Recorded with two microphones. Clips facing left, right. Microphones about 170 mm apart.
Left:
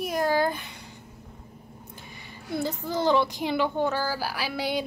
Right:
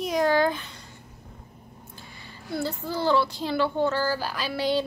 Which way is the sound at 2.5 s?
20° left (ahead or behind).